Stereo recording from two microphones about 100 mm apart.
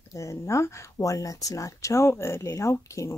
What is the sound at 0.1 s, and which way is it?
Speech, 30° left (ahead or behind).